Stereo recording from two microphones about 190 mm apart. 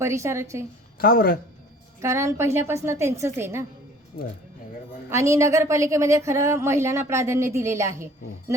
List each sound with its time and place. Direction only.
0.0 s a woman's voice: 15° right (ahead or behind)
0.9 s speech: 50° left (ahead or behind)
2.0 s a woman's voice: 15° right (ahead or behind)
4.1 s speech: 50° left (ahead or behind)
5.0 s a woman's voice: 15° right (ahead or behind)